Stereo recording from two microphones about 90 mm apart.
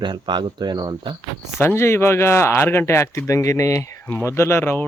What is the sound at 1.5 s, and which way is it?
Speech, 25° left (ahead or behind).